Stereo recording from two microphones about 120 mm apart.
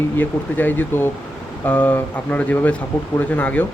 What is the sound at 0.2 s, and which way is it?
Speech, 15° left (ahead or behind).